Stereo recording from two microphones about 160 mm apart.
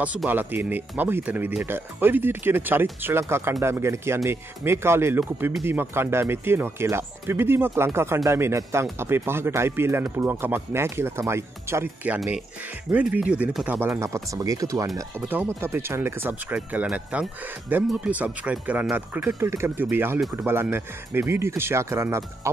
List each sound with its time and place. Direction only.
0.0 s speech: 10° right (ahead or behind)
12.2 s speech: centre (ahead or behind)
13.7 s speech: 15° right (ahead or behind)